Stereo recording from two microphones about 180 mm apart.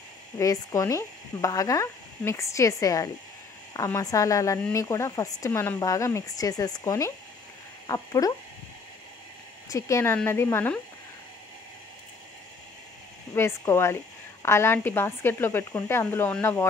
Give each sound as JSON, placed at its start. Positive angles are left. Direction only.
{"t": 0.4, "sound": "speech", "side_deg": 20}
{"t": 9.7, "sound": "speech", "side_deg": 15}
{"t": 13.3, "sound": "speech", "side_deg": 15}